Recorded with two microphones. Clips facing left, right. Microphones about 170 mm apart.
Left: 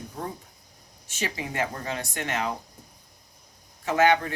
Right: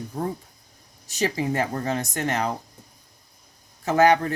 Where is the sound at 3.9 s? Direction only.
40° right (ahead or behind).